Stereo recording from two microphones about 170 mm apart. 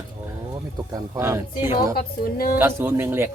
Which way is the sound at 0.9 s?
20° right (ahead or behind).